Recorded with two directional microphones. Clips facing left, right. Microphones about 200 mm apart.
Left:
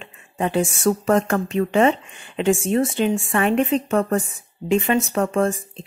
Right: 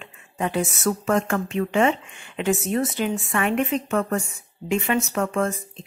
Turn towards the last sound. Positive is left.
turn(degrees=35)  # may be behind; listen again after turning